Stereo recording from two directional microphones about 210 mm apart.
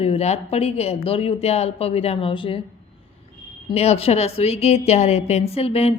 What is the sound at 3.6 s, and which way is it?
A woman's voice, 30° left (ahead or behind).